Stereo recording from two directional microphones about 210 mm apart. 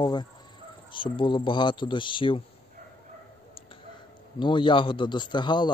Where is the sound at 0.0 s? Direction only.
20° left (ahead or behind).